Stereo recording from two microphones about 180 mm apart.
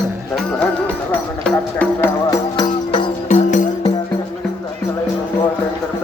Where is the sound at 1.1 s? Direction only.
10° left (ahead or behind); by 3.1 s 25° left (ahead or behind).